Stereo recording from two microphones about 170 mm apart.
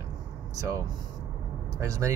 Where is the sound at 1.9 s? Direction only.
15° right (ahead or behind).